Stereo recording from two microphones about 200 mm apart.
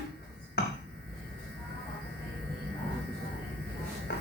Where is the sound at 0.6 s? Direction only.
50° left (ahead or behind).